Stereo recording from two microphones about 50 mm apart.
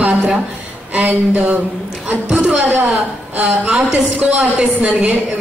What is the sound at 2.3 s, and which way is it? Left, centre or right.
Speech, right.